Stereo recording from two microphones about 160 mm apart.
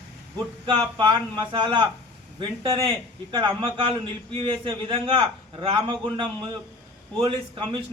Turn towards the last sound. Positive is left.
turn(degrees=-35)  # may be behind; listen again after turning